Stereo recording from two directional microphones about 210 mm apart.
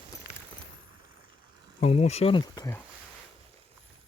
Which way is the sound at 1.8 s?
30° left (ahead or behind).